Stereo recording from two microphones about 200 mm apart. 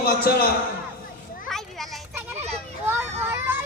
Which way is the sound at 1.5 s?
Centre (ahead or behind).